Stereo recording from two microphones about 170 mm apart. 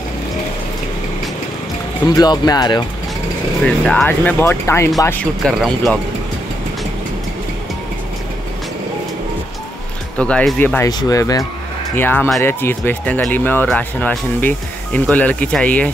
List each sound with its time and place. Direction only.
2.1 s speech: 25° left (ahead or behind)
3.6 s speech: 5° left (ahead or behind)
5.4 s speech: 5° left (ahead or behind)
10.1 s speech: 5° left (ahead or behind)
10.9 s speech: 20° left (ahead or behind)